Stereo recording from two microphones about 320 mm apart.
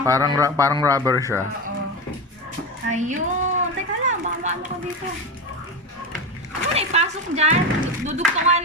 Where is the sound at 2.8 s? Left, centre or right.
Right.